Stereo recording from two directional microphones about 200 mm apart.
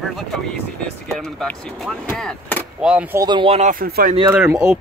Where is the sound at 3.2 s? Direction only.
25° right (ahead or behind); by 4.1 s 50° right (ahead or behind).